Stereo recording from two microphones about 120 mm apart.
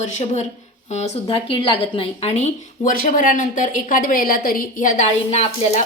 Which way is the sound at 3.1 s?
90° left.